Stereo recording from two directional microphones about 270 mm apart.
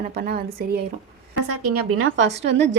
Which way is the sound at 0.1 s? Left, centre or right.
Right.